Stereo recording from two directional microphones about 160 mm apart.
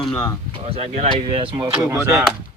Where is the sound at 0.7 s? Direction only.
40° right (ahead or behind).